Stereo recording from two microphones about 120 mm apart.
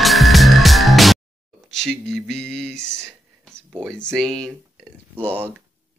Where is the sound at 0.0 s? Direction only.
Centre (ahead or behind).